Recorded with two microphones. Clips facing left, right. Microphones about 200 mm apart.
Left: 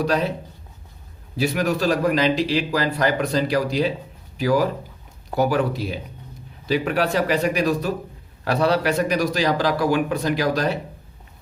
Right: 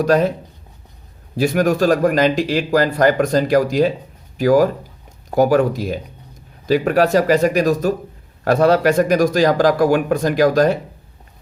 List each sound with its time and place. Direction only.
0.0 s speech: 45° right (ahead or behind)
1.4 s speech: 45° right (ahead or behind)